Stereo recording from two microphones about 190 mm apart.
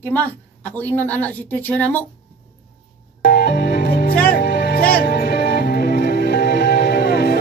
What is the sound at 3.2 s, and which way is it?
Music, 55° left (ahead or behind).